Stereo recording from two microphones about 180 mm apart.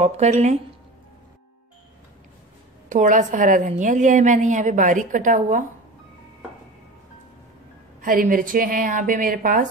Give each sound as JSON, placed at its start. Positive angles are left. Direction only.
{"t": 0.0, "sound": "speech", "side_deg": -40}
{"t": 2.9, "sound": "a woman's voice", "side_deg": -45}
{"t": 8.0, "sound": "a woman's voice", "side_deg": -50}